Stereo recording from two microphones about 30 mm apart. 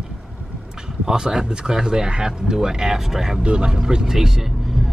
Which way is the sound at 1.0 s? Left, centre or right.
Centre.